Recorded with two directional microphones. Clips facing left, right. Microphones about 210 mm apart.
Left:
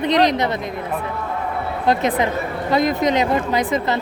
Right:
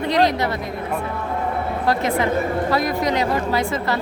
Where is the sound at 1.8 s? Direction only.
20° left (ahead or behind).